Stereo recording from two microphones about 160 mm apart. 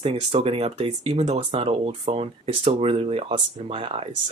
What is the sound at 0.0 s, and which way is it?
Speech, 40° right (ahead or behind).